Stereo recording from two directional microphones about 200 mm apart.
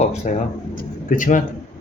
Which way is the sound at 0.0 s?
35° left (ahead or behind).